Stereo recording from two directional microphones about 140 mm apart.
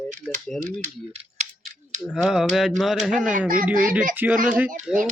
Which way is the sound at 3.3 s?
80° right.